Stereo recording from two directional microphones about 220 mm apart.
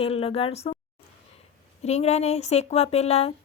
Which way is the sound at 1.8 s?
30° left (ahead or behind).